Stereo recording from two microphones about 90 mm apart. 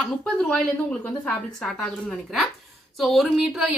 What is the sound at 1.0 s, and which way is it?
Speech, 15° left (ahead or behind).